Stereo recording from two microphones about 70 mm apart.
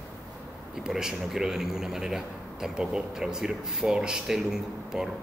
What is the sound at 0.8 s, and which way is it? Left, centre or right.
A man's voice, centre.